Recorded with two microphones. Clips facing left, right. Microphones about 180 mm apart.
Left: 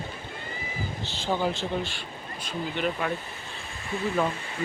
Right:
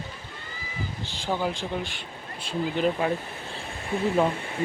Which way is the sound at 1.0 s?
10° right (ahead or behind).